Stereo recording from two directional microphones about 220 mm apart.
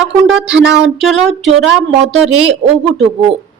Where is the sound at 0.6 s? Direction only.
50° right (ahead or behind).